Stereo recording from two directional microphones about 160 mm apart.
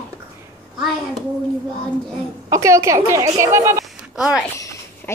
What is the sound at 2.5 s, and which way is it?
A woman's voice, 20° right (ahead or behind).